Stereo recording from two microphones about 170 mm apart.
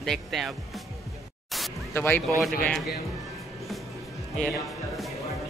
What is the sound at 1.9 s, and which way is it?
Speech, 10° left (ahead or behind).